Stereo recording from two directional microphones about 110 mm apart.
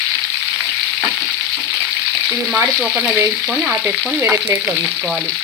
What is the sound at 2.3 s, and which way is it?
Frying, 20° right (ahead or behind).